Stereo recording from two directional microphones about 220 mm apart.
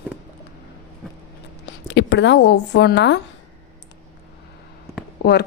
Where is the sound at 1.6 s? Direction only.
55° left (ahead or behind).